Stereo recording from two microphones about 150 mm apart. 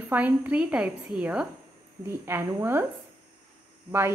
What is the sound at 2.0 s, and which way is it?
Speech, 15° right (ahead or behind).